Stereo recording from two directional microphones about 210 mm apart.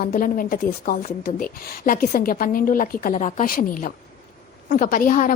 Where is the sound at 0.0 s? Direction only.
40° left (ahead or behind).